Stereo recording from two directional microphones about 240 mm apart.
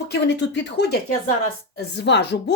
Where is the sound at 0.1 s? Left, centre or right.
Left.